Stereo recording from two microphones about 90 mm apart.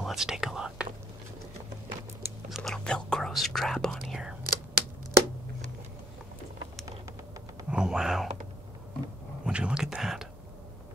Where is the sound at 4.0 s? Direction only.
5° right (ahead or behind).